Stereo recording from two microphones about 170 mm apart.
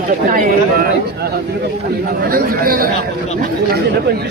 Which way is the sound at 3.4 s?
70° right (ahead or behind).